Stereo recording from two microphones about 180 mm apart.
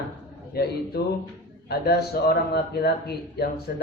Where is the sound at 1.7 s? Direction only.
60° left (ahead or behind).